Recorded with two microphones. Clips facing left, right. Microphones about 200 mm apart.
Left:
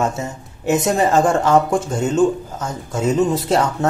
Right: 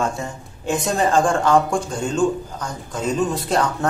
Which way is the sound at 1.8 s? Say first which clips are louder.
Left 4 dB; 20° left (ahead or behind).